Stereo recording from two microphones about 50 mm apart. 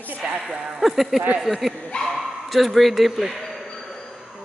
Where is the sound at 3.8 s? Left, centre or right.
Centre.